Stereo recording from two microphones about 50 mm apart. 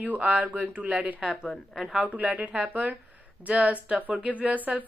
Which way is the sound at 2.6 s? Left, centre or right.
Right.